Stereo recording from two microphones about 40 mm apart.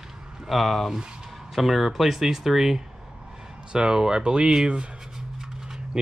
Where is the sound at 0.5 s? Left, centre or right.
Centre; by 4.6 s right.